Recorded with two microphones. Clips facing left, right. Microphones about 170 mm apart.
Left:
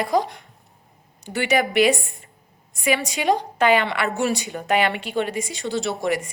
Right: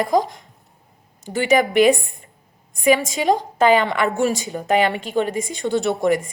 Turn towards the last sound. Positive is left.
turn(degrees=-50)  # may be behind; listen again after turning